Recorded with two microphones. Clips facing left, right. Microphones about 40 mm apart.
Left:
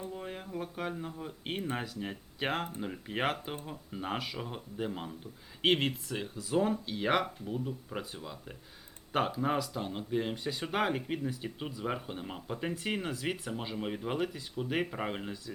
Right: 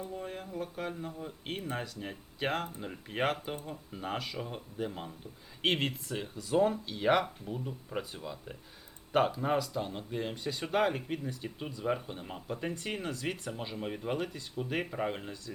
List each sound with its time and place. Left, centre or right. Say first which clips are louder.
0.1 s speech: even; centre